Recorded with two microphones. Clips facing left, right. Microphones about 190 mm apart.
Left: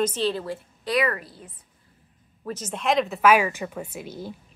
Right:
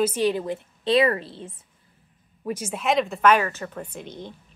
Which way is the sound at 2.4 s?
10° right (ahead or behind).